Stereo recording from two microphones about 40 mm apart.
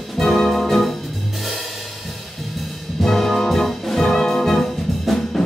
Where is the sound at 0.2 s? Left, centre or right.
Centre.